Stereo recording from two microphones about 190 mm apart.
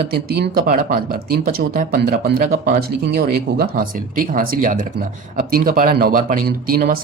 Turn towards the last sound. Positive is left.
turn(degrees=-50)  # may be behind; listen again after turning